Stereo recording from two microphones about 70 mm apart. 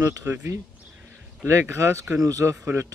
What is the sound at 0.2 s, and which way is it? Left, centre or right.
Speech, right.